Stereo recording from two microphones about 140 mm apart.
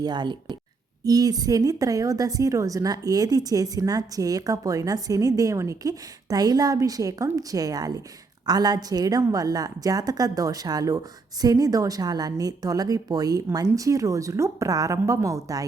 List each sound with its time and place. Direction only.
0.0 s a woman's voice: 30° right (ahead or behind)